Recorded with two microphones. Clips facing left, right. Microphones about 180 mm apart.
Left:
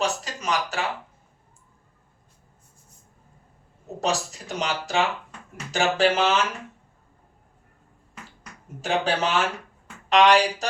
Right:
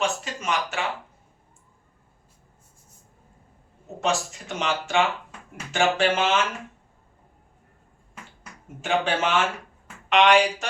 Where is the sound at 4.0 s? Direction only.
35° left (ahead or behind).